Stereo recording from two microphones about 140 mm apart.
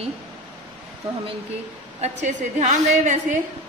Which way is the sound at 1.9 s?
55° right (ahead or behind).